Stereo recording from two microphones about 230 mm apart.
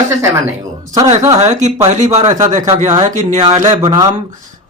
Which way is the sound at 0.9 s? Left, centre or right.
Centre.